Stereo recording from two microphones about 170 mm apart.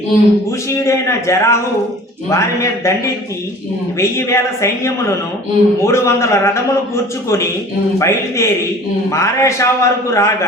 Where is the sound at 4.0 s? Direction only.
15° left (ahead or behind).